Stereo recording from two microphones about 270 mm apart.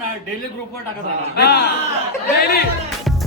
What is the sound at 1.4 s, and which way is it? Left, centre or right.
A man's voice, left.